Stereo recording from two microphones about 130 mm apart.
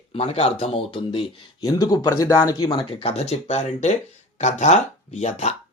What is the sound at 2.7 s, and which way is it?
Speech, 45° left (ahead or behind).